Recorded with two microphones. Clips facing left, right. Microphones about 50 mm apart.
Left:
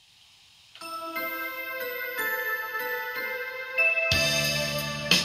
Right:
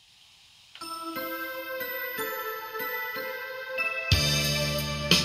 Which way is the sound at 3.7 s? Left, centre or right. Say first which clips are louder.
Left 5 dB; left.